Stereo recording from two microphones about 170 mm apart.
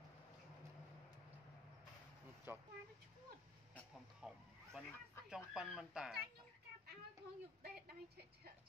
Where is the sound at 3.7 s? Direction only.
Centre (ahead or behind).